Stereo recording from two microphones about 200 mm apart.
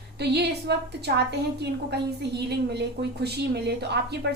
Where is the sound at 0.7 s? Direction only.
55° right (ahead or behind).